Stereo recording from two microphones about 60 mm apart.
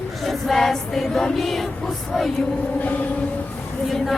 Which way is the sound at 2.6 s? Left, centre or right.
Left.